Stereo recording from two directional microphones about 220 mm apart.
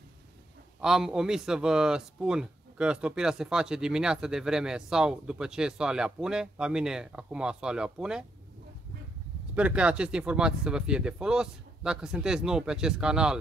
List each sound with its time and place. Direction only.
0.7 s speech: centre (ahead or behind)
9.6 s speech: 5° right (ahead or behind)